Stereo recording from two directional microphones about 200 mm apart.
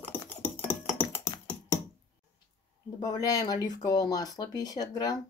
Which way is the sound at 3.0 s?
20° left (ahead or behind).